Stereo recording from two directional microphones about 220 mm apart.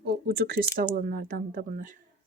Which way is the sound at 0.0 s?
45° right (ahead or behind).